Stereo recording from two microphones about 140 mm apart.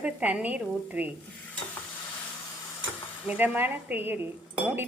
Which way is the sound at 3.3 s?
10° right (ahead or behind).